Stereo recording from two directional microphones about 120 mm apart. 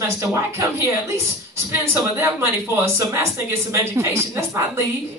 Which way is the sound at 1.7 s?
20° right (ahead or behind).